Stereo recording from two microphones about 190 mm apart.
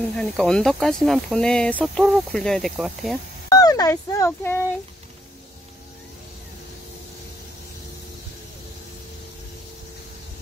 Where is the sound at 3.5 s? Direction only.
20° left (ahead or behind).